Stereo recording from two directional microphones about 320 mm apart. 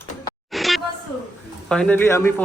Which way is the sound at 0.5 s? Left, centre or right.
Centre.